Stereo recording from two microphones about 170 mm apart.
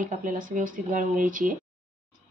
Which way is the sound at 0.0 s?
50° right (ahead or behind).